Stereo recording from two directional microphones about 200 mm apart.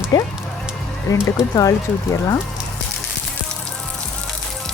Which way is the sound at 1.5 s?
15° left (ahead or behind).